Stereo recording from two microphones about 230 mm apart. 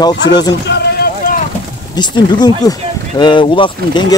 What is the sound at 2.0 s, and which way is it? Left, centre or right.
Speech, centre.